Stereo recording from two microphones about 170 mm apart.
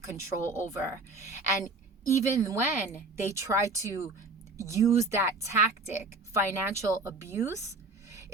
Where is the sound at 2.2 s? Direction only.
20° right (ahead or behind).